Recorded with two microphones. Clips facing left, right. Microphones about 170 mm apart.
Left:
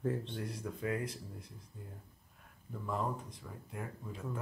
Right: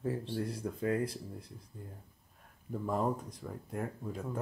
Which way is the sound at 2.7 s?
40° right (ahead or behind).